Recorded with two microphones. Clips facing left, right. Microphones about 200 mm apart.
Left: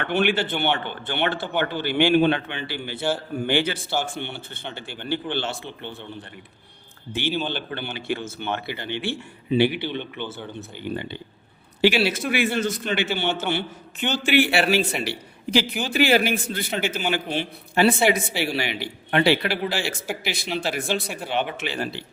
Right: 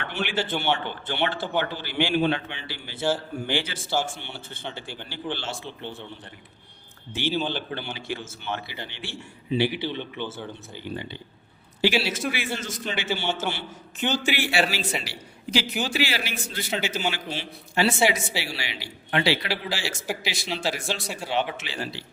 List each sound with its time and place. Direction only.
0.0 s a man's voice: 60° left (ahead or behind)
7.1 s a man's voice: 60° left (ahead or behind)